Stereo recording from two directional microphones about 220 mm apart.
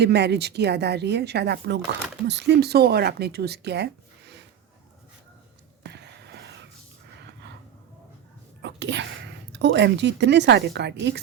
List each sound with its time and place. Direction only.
0.0 s speech: 50° right (ahead or behind)
5.8 s a sound: 50° right (ahead or behind)
8.6 s speech: 55° right (ahead or behind)